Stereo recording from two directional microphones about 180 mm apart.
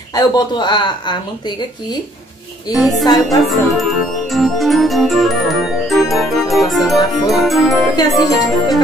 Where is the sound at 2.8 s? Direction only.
Centre (ahead or behind).